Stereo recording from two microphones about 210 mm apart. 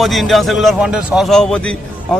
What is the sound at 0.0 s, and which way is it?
A man's voice, centre (ahead or behind).